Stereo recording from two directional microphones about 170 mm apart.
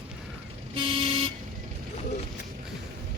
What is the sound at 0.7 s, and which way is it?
Vehicle, 35° right (ahead or behind).